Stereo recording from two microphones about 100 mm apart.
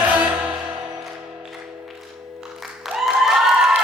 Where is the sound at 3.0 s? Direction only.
Centre (ahead or behind).